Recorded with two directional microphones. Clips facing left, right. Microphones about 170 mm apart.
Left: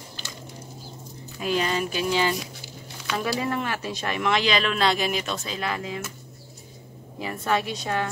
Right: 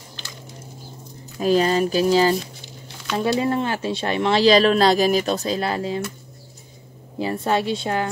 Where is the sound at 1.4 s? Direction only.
35° right (ahead or behind).